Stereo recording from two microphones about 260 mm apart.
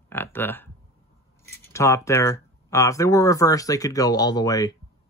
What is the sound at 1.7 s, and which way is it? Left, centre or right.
Speech, centre.